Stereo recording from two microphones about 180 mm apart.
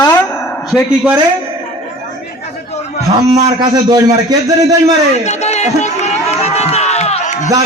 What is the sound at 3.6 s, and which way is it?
Speech, 20° right (ahead or behind).